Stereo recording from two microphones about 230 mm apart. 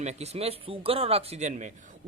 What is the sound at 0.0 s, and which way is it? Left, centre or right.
Speech, right.